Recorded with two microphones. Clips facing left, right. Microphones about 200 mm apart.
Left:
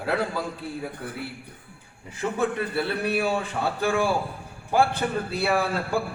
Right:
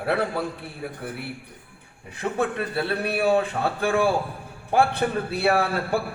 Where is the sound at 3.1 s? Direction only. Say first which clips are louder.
Right 4 dB; 60° right (ahead or behind).